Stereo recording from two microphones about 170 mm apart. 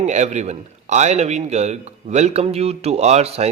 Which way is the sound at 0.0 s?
45° right (ahead or behind).